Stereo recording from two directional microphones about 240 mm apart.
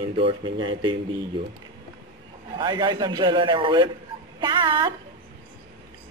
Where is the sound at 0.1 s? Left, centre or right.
Right.